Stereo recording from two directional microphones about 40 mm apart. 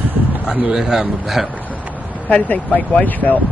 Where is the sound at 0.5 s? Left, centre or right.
Right.